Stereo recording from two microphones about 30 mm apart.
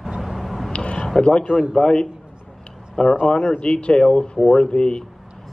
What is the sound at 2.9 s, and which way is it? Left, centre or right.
Speech, left.